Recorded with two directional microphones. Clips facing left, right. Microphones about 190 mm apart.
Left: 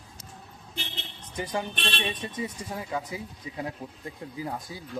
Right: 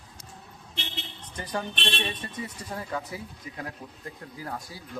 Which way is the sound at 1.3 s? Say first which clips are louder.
Left 2 dB; 10° left (ahead or behind).